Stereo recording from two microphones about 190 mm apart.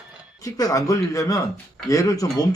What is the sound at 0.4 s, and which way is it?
Speech, 20° left (ahead or behind).